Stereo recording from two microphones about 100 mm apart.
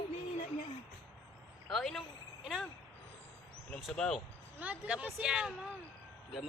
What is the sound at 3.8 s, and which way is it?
Speech, 5° left (ahead or behind).